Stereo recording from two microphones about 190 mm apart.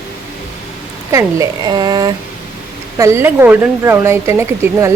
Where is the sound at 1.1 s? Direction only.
20° right (ahead or behind).